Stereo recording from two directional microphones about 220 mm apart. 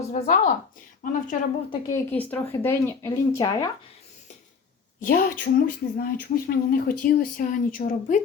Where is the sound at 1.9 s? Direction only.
10° left (ahead or behind).